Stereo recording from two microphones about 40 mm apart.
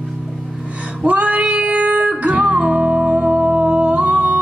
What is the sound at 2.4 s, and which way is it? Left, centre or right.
Music, right.